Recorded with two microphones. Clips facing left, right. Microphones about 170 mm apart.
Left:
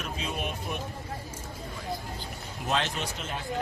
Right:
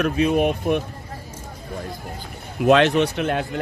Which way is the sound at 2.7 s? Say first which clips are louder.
Right 15 dB; 70° right (ahead or behind).